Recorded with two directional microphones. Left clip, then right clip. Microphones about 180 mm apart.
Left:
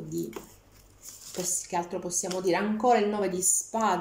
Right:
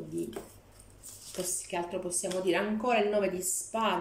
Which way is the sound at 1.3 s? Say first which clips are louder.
Left 4 dB; 25° left (ahead or behind).